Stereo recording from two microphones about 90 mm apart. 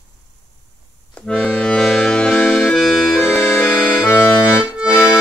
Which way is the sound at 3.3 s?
25° left (ahead or behind).